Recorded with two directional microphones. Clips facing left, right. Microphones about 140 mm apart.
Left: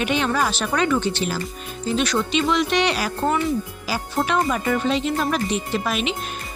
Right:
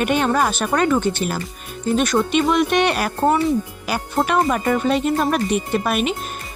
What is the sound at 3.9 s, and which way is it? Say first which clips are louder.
Speech: right 3 dB; 55° right (ahead or behind).